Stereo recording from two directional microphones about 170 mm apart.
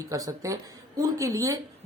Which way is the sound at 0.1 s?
20° right (ahead or behind).